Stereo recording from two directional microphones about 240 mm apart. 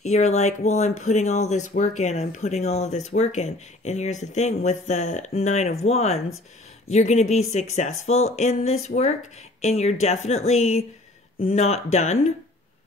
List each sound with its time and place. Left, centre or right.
0.0 s speech: left